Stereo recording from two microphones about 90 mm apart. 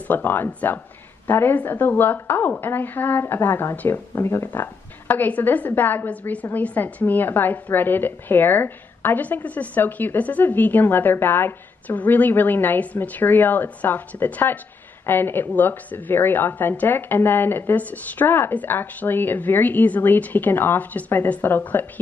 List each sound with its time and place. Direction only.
0.1 s a woman's voice: 20° left (ahead or behind)